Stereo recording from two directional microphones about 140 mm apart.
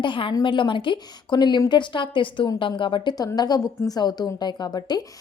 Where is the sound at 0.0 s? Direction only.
35° left (ahead or behind).